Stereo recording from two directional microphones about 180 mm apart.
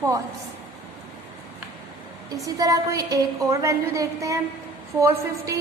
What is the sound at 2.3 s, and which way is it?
A woman's voice, 20° right (ahead or behind).